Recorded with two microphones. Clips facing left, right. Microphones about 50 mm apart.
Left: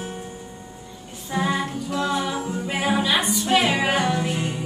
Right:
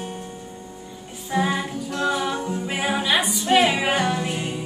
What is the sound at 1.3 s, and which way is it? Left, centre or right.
Music, centre.